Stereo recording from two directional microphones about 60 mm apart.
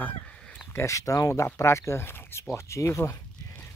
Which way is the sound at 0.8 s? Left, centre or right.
Left.